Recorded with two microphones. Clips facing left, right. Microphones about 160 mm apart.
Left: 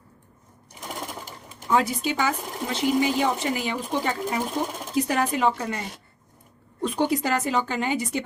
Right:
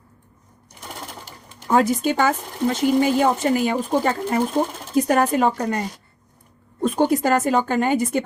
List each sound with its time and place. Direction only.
1.6 s speech: 50° right (ahead or behind)
6.8 s speech: 45° right (ahead or behind)